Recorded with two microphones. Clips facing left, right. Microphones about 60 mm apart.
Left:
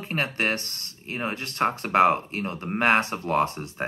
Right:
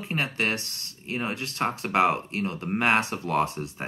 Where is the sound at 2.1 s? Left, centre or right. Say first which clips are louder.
Even; left.